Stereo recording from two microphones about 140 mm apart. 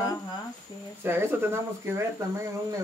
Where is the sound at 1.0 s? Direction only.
15° right (ahead or behind).